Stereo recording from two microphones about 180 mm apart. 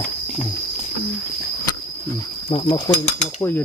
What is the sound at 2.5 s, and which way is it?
Speech, 25° left (ahead or behind).